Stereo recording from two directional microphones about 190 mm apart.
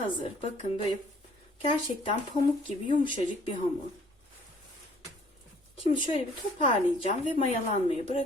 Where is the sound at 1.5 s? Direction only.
30° left (ahead or behind).